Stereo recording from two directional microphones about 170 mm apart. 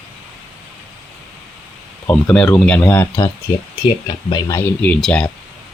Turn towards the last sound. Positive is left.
turn(degrees=5)  # may be behind; listen again after turning